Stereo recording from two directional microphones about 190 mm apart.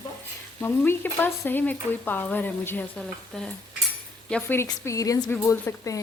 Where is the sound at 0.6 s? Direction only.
10° left (ahead or behind).